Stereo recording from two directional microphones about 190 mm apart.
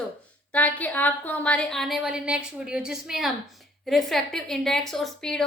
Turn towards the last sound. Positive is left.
turn(degrees=5)  # may be behind; listen again after turning